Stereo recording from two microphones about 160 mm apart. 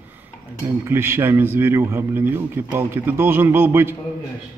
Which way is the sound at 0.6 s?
15° right (ahead or behind).